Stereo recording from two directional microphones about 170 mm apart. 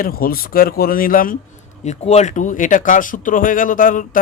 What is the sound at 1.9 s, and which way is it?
Speech, 40° left (ahead or behind).